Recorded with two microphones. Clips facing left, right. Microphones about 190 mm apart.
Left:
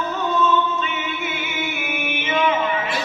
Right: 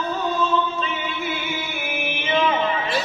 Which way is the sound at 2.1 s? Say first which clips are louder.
Even; 35° right (ahead or behind).